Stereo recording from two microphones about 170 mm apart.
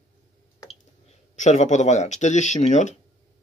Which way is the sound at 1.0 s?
45° left (ahead or behind).